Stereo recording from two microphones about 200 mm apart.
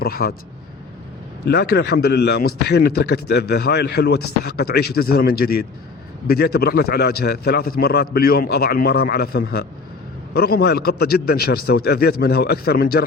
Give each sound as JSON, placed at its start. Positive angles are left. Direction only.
{"t": 0.0, "sound": "a man's voice", "side_deg": 50}
{"t": 1.5, "sound": "a man's voice", "side_deg": 55}